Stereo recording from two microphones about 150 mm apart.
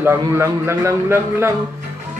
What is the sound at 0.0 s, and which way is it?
Music, 15° right (ahead or behind).